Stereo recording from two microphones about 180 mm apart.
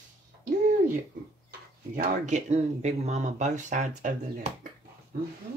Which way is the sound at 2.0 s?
40° right (ahead or behind).